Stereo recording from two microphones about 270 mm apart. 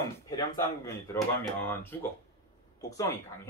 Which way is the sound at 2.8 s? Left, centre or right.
Centre.